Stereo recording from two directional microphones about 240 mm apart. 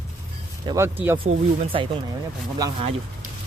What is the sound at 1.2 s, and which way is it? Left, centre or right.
Speech, right.